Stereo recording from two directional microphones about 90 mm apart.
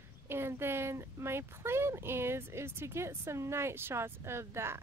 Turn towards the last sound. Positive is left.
turn(degrees=-30)  # may be behind; listen again after turning